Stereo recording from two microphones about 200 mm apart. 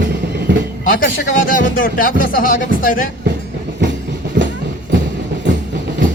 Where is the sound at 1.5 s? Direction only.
45° left (ahead or behind).